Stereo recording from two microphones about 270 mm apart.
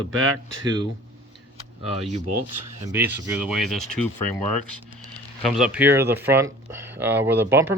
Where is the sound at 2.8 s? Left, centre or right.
Centre.